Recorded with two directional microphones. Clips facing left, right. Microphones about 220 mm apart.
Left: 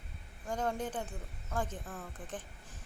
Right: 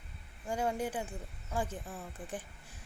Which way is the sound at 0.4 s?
10° right (ahead or behind).